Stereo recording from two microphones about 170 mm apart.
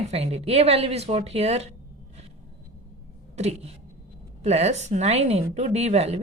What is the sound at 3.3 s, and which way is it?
A woman's voice, 40° right (ahead or behind).